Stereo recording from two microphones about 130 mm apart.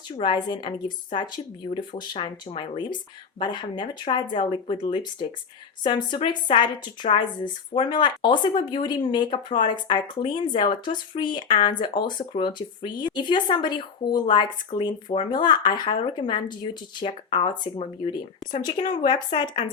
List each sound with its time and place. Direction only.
0.2 s speech: 35° left (ahead or behind)
19.6 s speech: 60° left (ahead or behind)